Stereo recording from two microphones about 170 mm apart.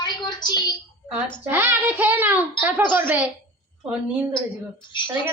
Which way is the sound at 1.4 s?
10° right (ahead or behind).